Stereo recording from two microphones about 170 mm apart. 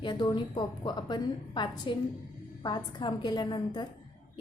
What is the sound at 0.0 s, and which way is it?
A woman's voice, 25° left (ahead or behind).